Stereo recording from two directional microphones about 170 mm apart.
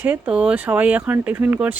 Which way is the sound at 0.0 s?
10° right (ahead or behind).